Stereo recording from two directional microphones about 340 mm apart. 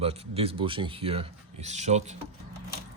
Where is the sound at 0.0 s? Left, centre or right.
Centre.